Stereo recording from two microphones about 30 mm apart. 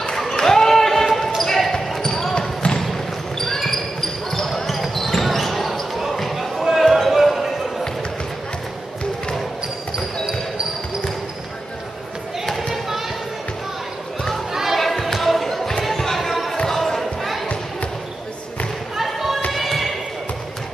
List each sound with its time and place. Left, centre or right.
0.0 s basketball bounce: centre
2.3 s basketball bounce: left
2.8 s basketball bounce: centre
12.4 s basketball bounce: centre
14.5 s basketball bounce: centre
14.8 s basketball bounce: centre
15.8 s a sound: centre
16.7 s basketball bounce: centre
19.1 s basketball bounce: centre